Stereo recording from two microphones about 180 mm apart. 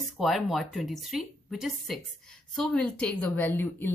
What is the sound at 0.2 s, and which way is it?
Speech, centre (ahead or behind).